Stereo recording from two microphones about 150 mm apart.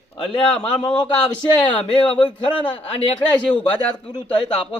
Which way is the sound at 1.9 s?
30° left (ahead or behind).